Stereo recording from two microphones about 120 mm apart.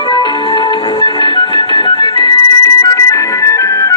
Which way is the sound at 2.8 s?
25° left (ahead or behind).